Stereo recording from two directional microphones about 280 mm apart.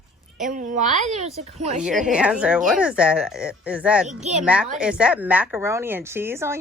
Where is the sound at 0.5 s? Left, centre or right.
Right.